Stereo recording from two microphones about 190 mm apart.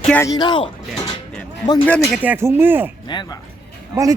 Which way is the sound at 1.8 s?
5° left (ahead or behind).